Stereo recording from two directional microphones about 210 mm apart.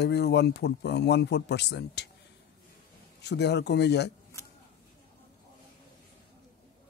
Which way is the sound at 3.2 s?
55° left (ahead or behind).